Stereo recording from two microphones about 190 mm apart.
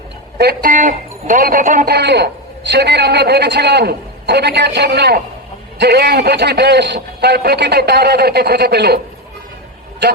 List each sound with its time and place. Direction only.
0.3 s a man's voice: 55° right (ahead or behind)